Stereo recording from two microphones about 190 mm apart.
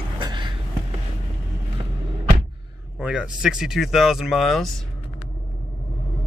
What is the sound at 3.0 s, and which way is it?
Speech, 5° right (ahead or behind).